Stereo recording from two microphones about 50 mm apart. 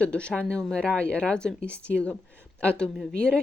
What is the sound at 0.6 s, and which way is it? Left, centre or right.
Speech, centre.